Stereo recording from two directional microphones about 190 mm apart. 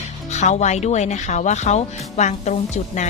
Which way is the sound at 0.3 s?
40° left (ahead or behind).